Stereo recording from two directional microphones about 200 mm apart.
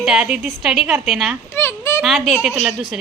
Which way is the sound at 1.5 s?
10° left (ahead or behind).